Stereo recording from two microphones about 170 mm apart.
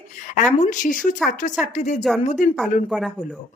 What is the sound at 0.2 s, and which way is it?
Speech, 45° left (ahead or behind).